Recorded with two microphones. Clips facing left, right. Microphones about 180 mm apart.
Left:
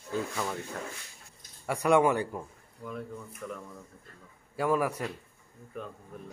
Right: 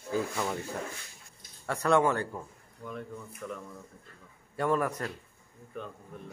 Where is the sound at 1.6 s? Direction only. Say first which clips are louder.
Left 2 dB; 10° left (ahead or behind).